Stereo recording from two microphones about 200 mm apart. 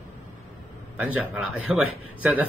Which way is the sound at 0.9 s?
5° right (ahead or behind).